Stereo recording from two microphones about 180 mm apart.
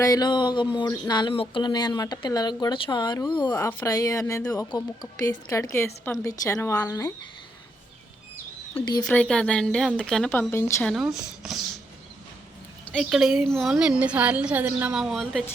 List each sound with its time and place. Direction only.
0.0 s speech: 20° left (ahead or behind)
9.0 s a woman's voice: 5° left (ahead or behind)
10.8 s a woman's voice: centre (ahead or behind)
12.8 s a woman's voice: 5° left (ahead or behind)